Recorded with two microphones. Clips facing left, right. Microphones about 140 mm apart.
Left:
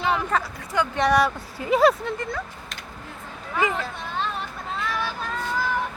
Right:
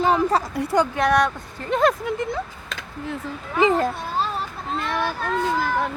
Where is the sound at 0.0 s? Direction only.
35° right (ahead or behind).